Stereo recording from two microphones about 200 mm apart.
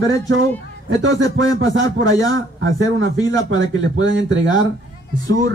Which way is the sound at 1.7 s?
70° right (ahead or behind).